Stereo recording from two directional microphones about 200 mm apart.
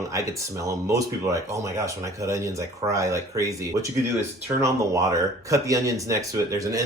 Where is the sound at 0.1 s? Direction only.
15° right (ahead or behind).